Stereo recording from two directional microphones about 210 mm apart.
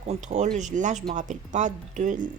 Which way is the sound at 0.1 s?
35° right (ahead or behind).